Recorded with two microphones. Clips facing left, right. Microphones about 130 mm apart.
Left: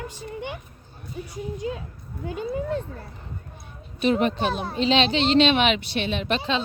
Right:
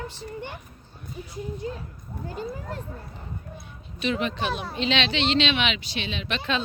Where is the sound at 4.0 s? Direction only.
45° left (ahead or behind).